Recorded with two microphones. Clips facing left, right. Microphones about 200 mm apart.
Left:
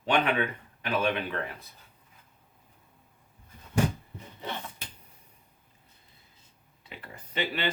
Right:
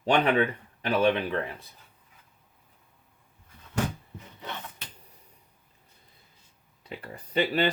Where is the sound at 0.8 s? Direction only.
35° right (ahead or behind).